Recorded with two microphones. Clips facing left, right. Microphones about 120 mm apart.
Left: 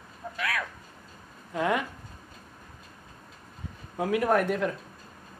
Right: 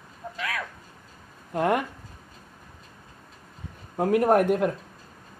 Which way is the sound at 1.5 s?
50° right (ahead or behind).